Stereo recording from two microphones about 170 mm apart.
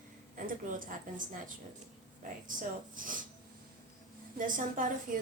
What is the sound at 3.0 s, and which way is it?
Speech, 55° right (ahead or behind).